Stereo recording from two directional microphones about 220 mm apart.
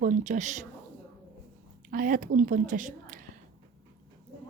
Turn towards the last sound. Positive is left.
turn(degrees=-35)  # may be behind; listen again after turning